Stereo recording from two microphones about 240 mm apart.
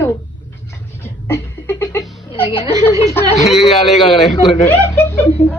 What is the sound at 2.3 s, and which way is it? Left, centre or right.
Speech, left.